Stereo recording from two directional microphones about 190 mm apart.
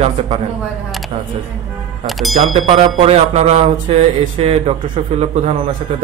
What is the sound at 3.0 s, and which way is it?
Speech, 35° right (ahead or behind).